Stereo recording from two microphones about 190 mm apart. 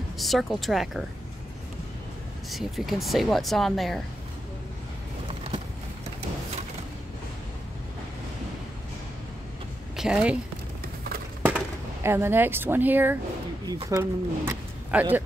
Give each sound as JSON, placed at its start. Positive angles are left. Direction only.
{"t": 0.2, "sound": "speech", "side_deg": 0}
{"t": 2.5, "sound": "speech", "side_deg": 0}
{"t": 9.9, "sound": "a woman's voice", "side_deg": -5}
{"t": 11.4, "sound": "speech", "side_deg": -10}